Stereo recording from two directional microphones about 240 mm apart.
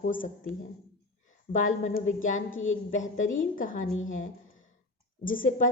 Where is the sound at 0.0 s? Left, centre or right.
Left.